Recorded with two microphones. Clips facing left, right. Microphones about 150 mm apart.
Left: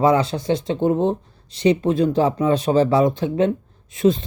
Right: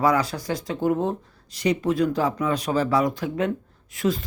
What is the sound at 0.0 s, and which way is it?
Speech, 25° left (ahead or behind).